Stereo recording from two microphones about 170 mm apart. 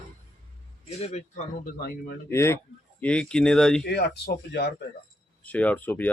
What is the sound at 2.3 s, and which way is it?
Speech, 15° left (ahead or behind).